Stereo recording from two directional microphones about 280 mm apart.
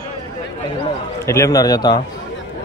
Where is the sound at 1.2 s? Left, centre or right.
Centre.